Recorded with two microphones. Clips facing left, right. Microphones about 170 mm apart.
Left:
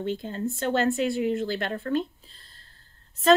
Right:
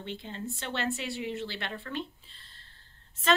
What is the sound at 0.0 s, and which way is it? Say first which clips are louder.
Speech: left 9 dB; 45° left (ahead or behind).